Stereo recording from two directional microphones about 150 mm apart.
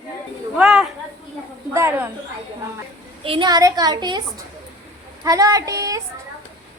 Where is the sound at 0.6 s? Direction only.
Centre (ahead or behind).